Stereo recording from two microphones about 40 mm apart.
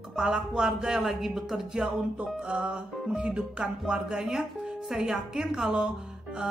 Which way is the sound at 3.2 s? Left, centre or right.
Right.